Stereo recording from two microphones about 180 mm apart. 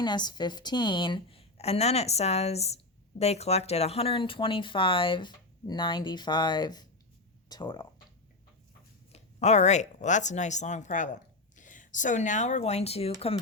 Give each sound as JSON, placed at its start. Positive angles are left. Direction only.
{"t": 0.0, "sound": "a woman's voice", "side_deg": 25}
{"t": 9.1, "sound": "speech", "side_deg": 40}